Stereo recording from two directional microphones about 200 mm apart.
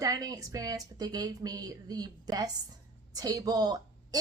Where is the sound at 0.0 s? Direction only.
20° right (ahead or behind).